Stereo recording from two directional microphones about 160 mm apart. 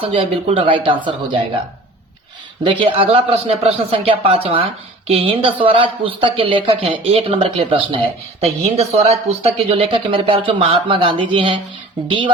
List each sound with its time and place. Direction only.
0.0 s speech: 35° right (ahead or behind)
2.6 s speech: 35° right (ahead or behind)